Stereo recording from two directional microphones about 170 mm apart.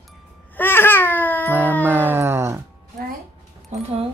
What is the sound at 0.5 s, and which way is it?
Baby cry, 10° left (ahead or behind).